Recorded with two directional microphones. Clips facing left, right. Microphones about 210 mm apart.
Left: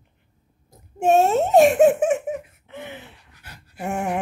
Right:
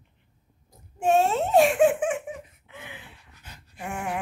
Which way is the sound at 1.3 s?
45° left (ahead or behind).